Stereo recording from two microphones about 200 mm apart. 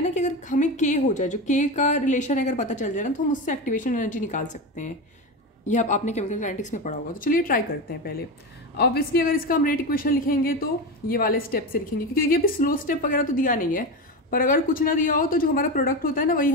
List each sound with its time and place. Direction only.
0.0 s a woman's voice: 35° left (ahead or behind)